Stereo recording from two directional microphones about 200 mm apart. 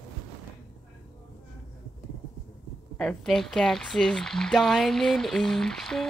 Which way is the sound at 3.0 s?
5° left (ahead or behind).